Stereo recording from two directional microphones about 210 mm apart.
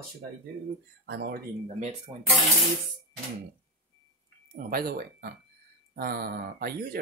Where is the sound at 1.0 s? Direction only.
50° right (ahead or behind).